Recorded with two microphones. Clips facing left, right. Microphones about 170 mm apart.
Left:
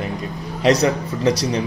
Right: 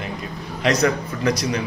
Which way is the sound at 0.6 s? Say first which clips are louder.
Left 3 dB; 35° left (ahead or behind).